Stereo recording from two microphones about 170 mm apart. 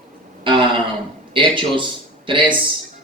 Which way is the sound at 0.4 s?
30° right (ahead or behind).